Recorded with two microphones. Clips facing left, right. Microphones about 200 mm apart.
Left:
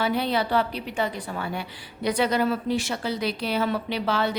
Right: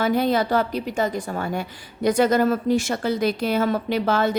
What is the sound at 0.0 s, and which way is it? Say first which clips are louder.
A woman's voice: right 4 dB; 45° right (ahead or behind).